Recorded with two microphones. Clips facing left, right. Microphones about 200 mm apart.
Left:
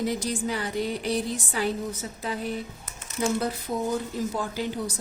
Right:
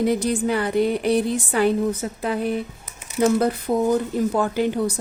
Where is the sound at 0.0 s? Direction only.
60° right (ahead or behind).